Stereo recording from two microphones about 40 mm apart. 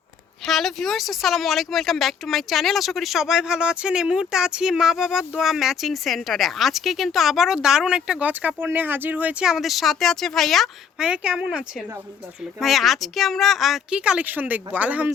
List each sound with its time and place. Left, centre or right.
0.4 s speech: centre
3.2 s speech: centre
8.2 s speech: right
8.5 s speech: right
9.6 s speech: centre
10.9 s speech: centre
12.5 s speech: centre
13.9 s speech: right
14.3 s speech: right